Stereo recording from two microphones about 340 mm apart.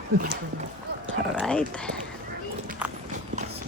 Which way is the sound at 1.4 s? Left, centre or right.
Centre.